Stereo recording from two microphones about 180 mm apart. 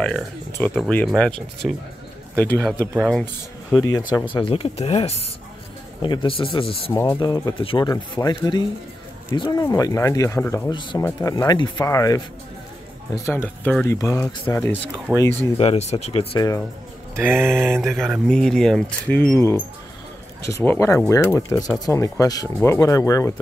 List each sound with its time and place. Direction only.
0.5 s speech: 10° left (ahead or behind)
3.7 s speech: 20° left (ahead or behind)
6.9 s speech: 15° left (ahead or behind)
10.7 s speech: 25° left (ahead or behind)
11.0 s speech: 15° left (ahead or behind)
15.5 s speech: 35° left (ahead or behind)
16.3 s speech: 20° left (ahead or behind)
17.2 s a sound: 15° right (ahead or behind)
17.8 s speech: centre (ahead or behind); by 23.3 s 20° left (ahead or behind)